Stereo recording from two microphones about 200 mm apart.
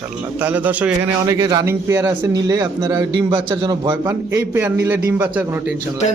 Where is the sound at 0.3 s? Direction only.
10° right (ahead or behind).